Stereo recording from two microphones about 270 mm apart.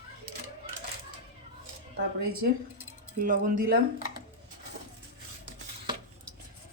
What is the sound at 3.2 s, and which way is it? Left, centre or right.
Speech, right.